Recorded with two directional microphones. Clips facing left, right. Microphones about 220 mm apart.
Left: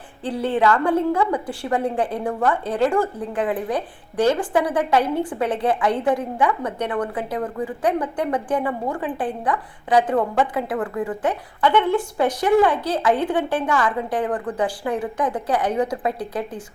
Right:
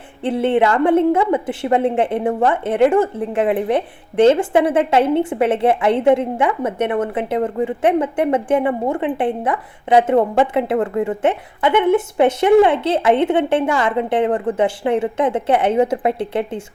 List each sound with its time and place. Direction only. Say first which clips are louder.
0.2 s a woman's voice: right 5 dB; 25° right (ahead or behind)